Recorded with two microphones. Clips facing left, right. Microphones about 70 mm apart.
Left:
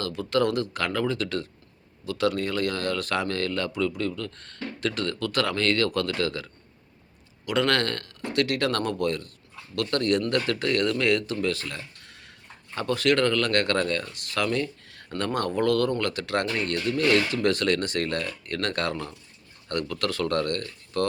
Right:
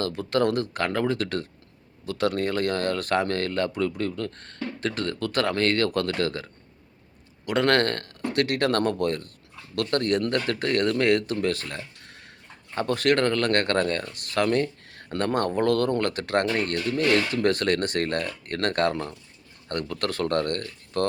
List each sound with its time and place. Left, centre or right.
0.0 s speech: right